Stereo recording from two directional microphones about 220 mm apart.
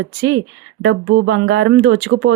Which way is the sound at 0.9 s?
50° right (ahead or behind).